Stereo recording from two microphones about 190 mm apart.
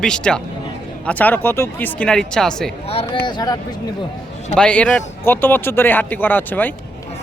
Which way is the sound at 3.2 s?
20° left (ahead or behind).